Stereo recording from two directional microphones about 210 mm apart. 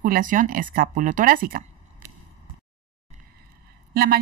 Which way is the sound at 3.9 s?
45° right (ahead or behind).